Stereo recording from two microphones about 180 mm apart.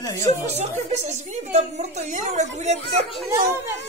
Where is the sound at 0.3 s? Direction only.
40° right (ahead or behind).